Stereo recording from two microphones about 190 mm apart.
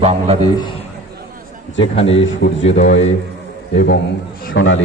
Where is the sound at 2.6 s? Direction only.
40° left (ahead or behind).